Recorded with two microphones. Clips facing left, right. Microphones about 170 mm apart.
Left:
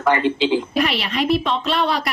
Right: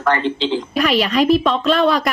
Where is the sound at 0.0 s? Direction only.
10° left (ahead or behind).